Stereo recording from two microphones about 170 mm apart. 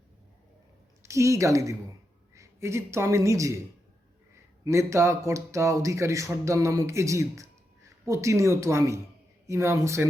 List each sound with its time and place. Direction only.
1.0 s speech: 15° right (ahead or behind)
4.6 s speech: 15° right (ahead or behind)